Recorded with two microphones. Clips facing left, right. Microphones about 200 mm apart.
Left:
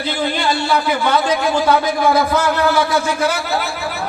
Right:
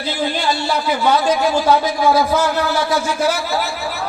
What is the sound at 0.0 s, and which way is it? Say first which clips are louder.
A man's voice: left 1 dB; 55° left (ahead or behind).